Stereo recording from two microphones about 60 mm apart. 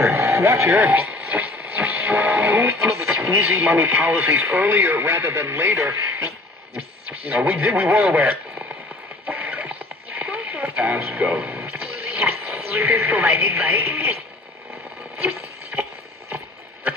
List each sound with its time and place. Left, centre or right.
0.0 s radio: right
0.7 s radio: right
3.6 s speech: right
6.7 s radio: right
7.3 s speech: right
9.3 s radio: right
11.1 s a sound: right
12.9 s speech: right
15.1 s a sound: right